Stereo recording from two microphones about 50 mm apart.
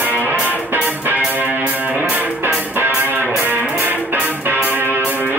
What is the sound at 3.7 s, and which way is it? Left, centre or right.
Music, right.